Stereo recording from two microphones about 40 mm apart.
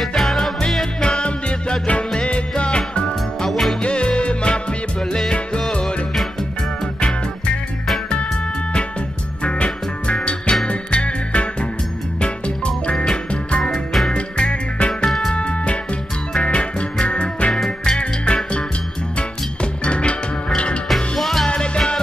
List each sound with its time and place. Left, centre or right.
0.0 s music: centre
1.0 s music: left
3.4 s music: centre
3.8 s music: left
5.7 s music: left
9.4 s music: left
13.6 s music: centre
14.1 s music: left
15.0 s music: centre
15.3 s music: left
20.9 s music: centre
21.5 s music: left